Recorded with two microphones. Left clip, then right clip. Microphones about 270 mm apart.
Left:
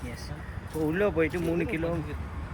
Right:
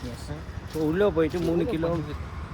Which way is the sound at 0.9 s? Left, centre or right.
Centre.